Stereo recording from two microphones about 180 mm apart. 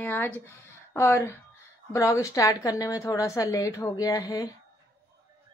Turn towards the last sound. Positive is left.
turn(degrees=20)  # may be behind; listen again after turning